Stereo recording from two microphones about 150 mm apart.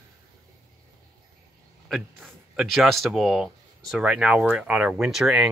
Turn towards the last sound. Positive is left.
turn(degrees=0)  # may be behind; listen again after turning